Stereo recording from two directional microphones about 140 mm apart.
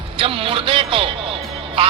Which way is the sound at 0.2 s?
40° right (ahead or behind).